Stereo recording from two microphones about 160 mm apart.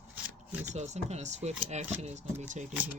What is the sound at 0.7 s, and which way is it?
Speech, 45° right (ahead or behind).